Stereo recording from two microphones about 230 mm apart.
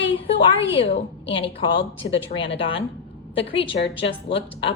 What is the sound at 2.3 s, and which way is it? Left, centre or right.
Speech, left.